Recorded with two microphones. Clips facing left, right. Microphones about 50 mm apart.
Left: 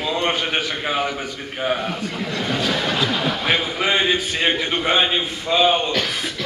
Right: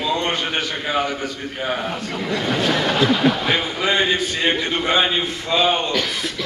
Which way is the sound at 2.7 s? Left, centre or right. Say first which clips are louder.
Right 5 dB; right.